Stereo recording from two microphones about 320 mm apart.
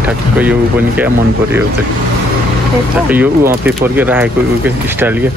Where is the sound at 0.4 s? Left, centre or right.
Centre.